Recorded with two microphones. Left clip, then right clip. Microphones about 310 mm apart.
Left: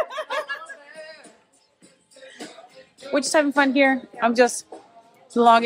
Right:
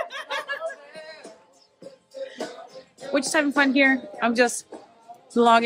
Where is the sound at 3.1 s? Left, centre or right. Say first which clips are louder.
Left 2 dB; centre.